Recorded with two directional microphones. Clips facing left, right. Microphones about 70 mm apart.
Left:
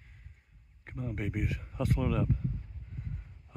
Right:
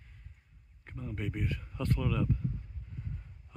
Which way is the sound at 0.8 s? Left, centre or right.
Centre.